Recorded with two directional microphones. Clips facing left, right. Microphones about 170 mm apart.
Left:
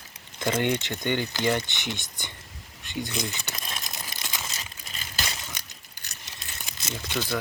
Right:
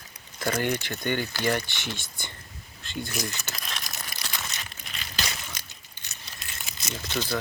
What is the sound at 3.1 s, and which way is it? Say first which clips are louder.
Crumpling: left 1 dB; 20° left (ahead or behind).